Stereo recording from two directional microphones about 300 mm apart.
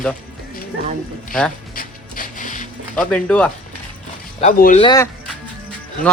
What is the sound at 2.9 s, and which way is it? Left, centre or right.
Speech, centre.